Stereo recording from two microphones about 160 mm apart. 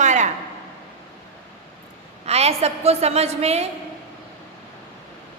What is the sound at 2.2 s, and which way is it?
A man's voice, 40° right (ahead or behind).